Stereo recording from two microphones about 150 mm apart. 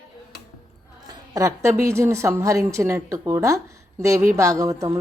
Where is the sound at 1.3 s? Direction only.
20° right (ahead or behind).